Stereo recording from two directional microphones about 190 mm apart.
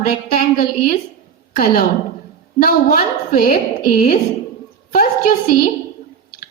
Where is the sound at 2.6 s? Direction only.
50° left (ahead or behind).